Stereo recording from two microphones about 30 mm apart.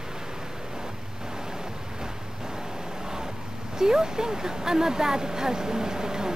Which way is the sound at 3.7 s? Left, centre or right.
Right.